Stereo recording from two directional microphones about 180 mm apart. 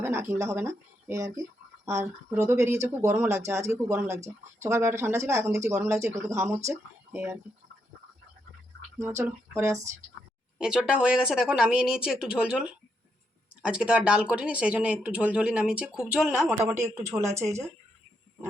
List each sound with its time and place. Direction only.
0.0 s speech: 15° right (ahead or behind)
9.0 s speech: 15° right (ahead or behind)
10.6 s speech: 5° right (ahead or behind)
16.8 s speech: 15° right (ahead or behind)